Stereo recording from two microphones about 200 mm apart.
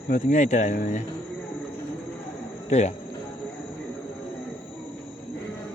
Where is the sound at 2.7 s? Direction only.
35° left (ahead or behind).